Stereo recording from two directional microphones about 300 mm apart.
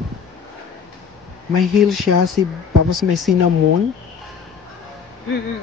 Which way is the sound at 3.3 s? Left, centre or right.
Centre.